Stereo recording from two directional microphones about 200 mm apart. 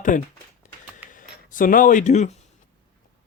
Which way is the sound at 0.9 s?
40° left (ahead or behind).